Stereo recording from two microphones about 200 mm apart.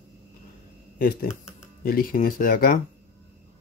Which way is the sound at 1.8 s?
45° left (ahead or behind).